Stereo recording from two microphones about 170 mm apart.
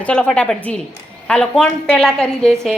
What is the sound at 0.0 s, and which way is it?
A woman's voice, 5° left (ahead or behind).